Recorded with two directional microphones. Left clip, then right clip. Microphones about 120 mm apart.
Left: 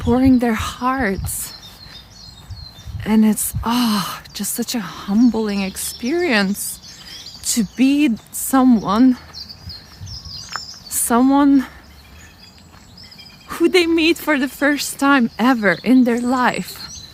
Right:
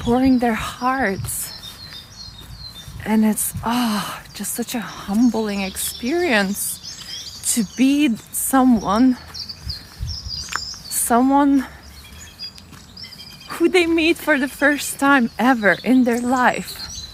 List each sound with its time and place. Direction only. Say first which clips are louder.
0.0 s speech: left 2 dB; 40° left (ahead or behind)
3.0 s speech: left 2 dB; 40° left (ahead or behind)
7.5 s speech: left 1 dB; 25° left (ahead or behind)
10.9 s a sound: even; 30° left (ahead or behind)
11.2 s speech: left 3 dB; 45° left (ahead or behind)
13.5 s speech: left 2 dB; 35° left (ahead or behind)
16.6 s a sound: right 1 dB; 30° left (ahead or behind)